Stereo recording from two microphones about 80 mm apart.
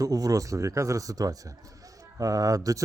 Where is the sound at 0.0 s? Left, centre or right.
Right.